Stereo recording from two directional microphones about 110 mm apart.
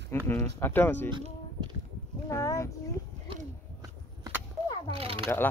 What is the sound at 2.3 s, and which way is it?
Speech, 25° left (ahead or behind).